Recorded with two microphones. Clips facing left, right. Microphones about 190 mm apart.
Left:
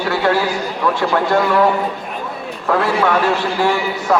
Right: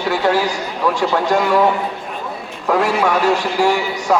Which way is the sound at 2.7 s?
15° right (ahead or behind).